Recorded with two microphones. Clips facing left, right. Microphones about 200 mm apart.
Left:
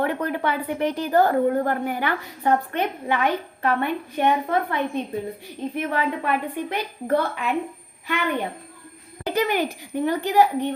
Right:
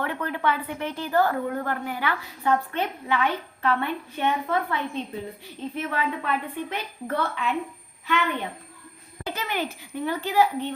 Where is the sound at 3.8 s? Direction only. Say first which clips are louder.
Left 5 dB; 15° left (ahead or behind).